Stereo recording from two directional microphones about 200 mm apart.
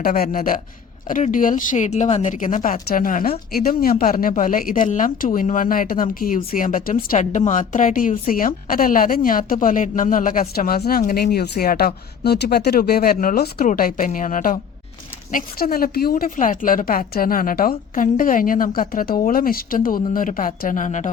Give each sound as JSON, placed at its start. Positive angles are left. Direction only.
{"t": 0.0, "sound": "a woman's voice", "side_deg": 45}